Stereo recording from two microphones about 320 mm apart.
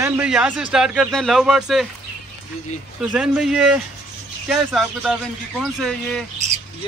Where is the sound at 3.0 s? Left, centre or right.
Centre.